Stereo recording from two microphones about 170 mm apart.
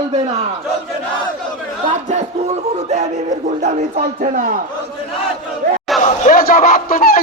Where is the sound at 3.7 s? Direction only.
45° right (ahead or behind).